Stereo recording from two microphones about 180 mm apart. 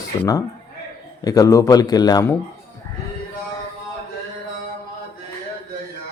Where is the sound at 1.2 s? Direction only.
20° left (ahead or behind).